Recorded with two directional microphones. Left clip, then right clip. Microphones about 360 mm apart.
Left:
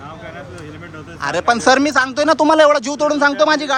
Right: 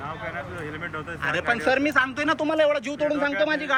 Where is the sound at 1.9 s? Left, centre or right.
Centre.